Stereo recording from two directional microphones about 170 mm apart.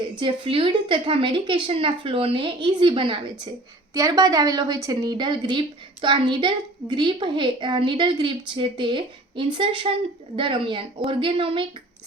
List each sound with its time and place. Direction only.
0.0 s a woman's voice: 30° right (ahead or behind)